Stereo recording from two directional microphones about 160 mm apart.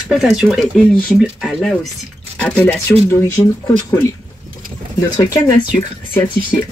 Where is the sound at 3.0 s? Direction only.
20° left (ahead or behind).